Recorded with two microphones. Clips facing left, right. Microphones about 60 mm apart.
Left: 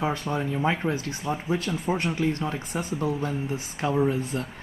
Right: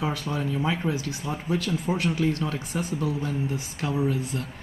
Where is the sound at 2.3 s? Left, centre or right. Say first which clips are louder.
Even; left.